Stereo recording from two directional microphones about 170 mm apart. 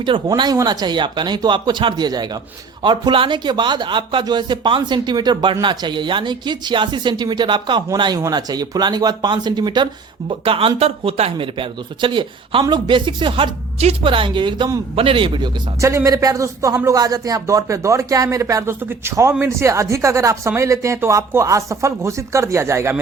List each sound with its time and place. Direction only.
0.0 s speech: 25° right (ahead or behind)
15.8 s a man's voice: 15° right (ahead or behind)